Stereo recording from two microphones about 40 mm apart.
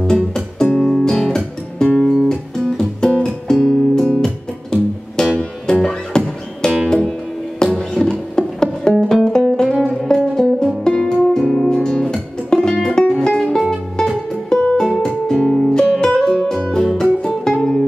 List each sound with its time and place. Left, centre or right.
0.0 s music: centre
17.6 s music: centre